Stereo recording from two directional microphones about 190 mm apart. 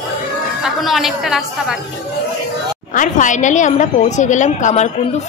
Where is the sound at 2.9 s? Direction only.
45° left (ahead or behind).